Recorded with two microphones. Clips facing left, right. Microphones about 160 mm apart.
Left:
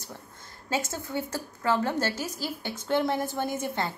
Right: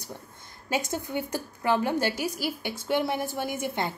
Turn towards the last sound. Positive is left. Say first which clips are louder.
# even
turn(degrees=-15)  # may be behind; listen again after turning